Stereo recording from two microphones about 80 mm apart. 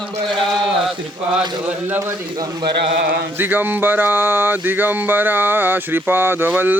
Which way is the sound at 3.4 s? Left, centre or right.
Right.